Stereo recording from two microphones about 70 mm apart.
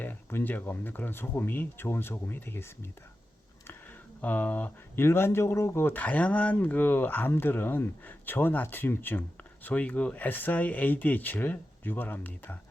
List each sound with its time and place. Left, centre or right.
0.0 s speech: left
4.2 s speech: left
4.9 s speech: left